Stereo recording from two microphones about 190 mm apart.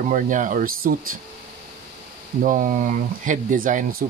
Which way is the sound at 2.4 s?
45° right (ahead or behind).